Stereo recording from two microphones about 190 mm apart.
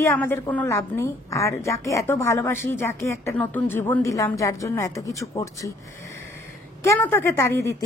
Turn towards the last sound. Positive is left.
turn(degrees=15)  # may be behind; listen again after turning